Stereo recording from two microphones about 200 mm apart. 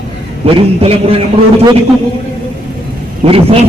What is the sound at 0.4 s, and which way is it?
Speech, 30° right (ahead or behind).